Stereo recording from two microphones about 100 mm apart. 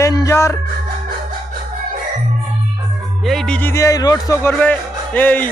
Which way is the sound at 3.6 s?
25° left (ahead or behind).